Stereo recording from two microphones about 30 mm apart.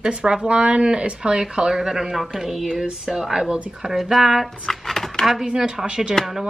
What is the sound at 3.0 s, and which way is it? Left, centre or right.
Speech, centre.